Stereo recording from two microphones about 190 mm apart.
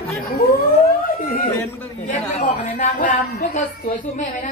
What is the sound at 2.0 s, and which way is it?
Speech, 40° left (ahead or behind).